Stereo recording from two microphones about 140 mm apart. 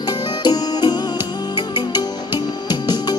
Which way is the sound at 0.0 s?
30° left (ahead or behind).